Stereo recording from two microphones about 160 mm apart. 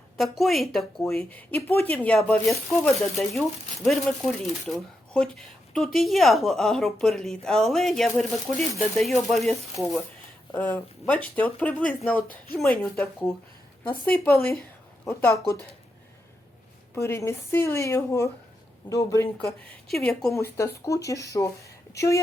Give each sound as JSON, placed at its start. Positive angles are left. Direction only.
{"t": 0.2, "sound": "speech", "side_deg": 0}
{"t": 10.5, "sound": "speech", "side_deg": 10}
{"t": 14.3, "sound": "speech", "side_deg": 0}
{"t": 15.0, "sound": "speech", "side_deg": 20}
{"t": 16.9, "sound": "a woman's voice", "side_deg": 15}
{"t": 19.9, "sound": "speech", "side_deg": 5}
{"t": 20.3, "sound": "a woman's voice", "side_deg": 20}